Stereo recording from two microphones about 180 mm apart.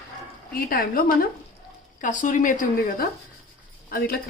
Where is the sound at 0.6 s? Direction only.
55° left (ahead or behind).